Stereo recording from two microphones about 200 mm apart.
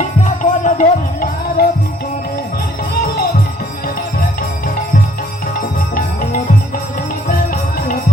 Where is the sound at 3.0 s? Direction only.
50° left (ahead or behind).